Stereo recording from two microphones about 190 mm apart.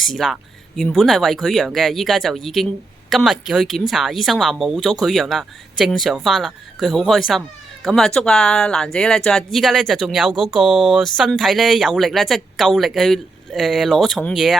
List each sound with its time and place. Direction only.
0.0 s speech: centre (ahead or behind)